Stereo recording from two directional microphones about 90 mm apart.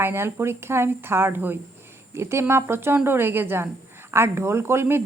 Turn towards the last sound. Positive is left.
turn(degrees=-25)  # may be behind; listen again after turning